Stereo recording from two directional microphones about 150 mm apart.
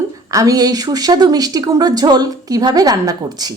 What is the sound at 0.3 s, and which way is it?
Speech, 20° right (ahead or behind).